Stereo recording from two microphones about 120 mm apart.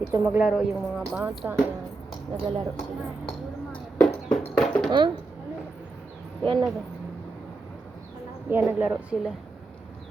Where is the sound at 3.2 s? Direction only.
10° left (ahead or behind).